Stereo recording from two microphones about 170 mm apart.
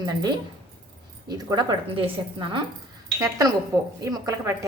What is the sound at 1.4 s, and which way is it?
A woman's voice, 25° right (ahead or behind).